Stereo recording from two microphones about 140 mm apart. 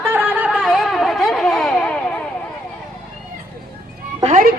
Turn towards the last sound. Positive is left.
turn(degrees=-75)  # may be behind; listen again after turning